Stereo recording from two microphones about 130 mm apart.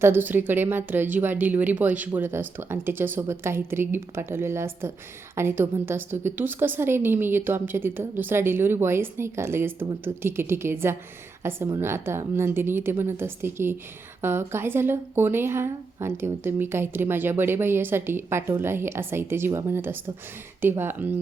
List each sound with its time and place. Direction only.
0.0 s a woman's voice: 15° right (ahead or behind)